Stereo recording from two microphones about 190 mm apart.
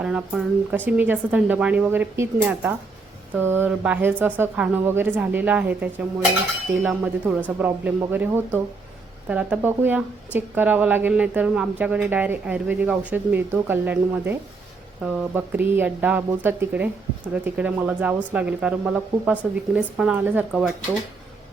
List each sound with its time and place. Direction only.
0.0 s speech: 5° right (ahead or behind)